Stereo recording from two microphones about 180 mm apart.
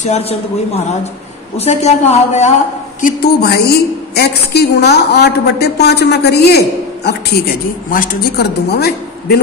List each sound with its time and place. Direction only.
0.0 s a woman's voice: 40° left (ahead or behind)
1.6 s a woman's voice: 35° left (ahead or behind)
3.0 s a woman's voice: 55° left (ahead or behind)
7.9 s a woman's voice: 50° left (ahead or behind)